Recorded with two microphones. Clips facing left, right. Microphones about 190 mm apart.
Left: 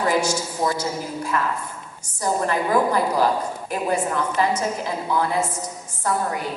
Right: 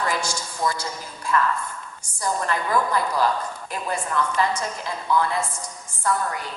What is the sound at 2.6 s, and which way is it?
Speech, 35° left (ahead or behind).